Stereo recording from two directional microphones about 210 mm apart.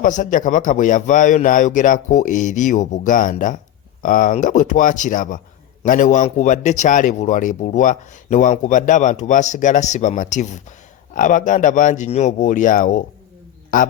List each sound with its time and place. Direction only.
0.0 s speech: 40° left (ahead or behind)